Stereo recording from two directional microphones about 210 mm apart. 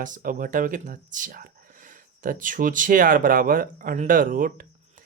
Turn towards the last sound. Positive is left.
turn(degrees=-40)  # may be behind; listen again after turning